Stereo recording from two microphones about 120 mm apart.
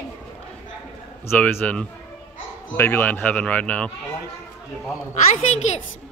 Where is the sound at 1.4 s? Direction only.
10° left (ahead or behind).